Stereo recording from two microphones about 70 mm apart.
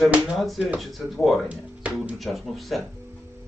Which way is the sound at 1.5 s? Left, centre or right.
Centre.